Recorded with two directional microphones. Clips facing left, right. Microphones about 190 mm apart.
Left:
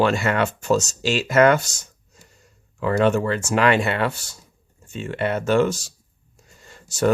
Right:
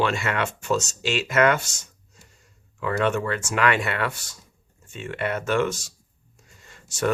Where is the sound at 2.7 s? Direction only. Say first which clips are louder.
Left 5 dB; 35° left (ahead or behind).